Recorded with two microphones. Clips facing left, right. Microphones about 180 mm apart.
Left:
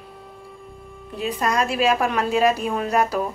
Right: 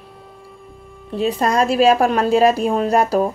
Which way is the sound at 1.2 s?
35° right (ahead or behind).